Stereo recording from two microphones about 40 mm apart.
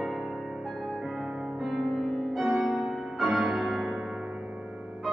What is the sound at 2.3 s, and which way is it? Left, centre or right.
Music, centre.